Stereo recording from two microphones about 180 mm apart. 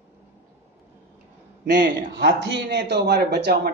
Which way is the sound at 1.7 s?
70° right (ahead or behind).